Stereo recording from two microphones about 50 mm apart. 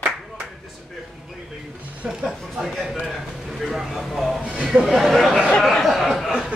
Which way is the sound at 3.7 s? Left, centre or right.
Centre.